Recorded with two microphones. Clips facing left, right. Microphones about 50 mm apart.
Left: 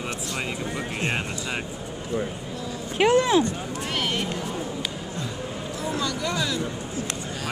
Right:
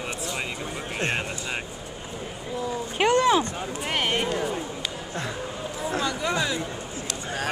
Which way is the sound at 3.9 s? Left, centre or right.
Right.